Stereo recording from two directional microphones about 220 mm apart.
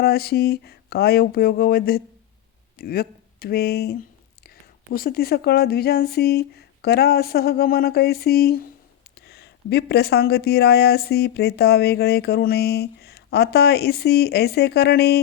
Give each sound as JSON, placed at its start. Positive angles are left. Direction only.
{"t": 0.0, "sound": "speech", "side_deg": 45}
{"t": 4.9, "sound": "speech", "side_deg": 45}